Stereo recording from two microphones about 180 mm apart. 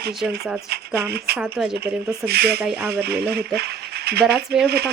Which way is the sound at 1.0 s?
60° right (ahead or behind).